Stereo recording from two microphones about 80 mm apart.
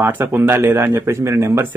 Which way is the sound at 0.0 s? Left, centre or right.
Right.